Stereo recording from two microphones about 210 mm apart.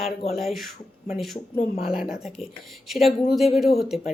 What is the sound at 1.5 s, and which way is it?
Speech, 35° left (ahead or behind).